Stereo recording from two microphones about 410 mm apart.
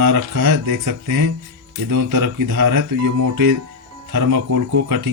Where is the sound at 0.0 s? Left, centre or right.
Right.